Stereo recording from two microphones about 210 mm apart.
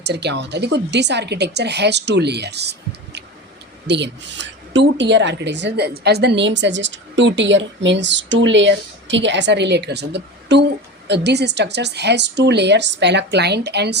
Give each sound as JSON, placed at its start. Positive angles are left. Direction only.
{"t": 0.0, "sound": "a woman's voice", "side_deg": -55}